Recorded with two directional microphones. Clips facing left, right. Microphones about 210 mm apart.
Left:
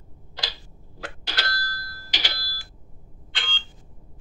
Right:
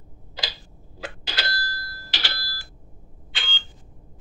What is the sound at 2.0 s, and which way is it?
Telephone, 15° left (ahead or behind).